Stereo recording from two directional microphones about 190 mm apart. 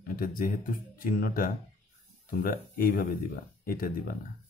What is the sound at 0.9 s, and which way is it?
A man's voice, 45° left (ahead or behind).